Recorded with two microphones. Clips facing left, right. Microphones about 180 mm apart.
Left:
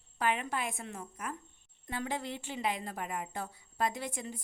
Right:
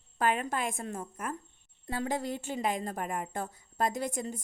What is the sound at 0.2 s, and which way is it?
A woman's voice, 45° right (ahead or behind).